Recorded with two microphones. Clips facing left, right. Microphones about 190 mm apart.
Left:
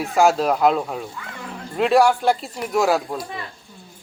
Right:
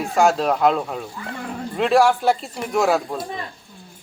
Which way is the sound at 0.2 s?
Centre (ahead or behind).